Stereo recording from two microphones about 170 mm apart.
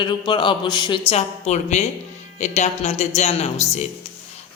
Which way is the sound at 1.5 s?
40° left (ahead or behind).